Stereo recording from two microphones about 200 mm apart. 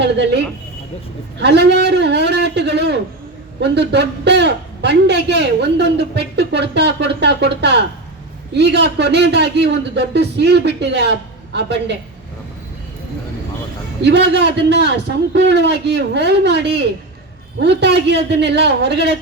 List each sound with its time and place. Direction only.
0.0 s a man's voice: 60° right (ahead or behind)
14.0 s a man's voice: 55° right (ahead or behind)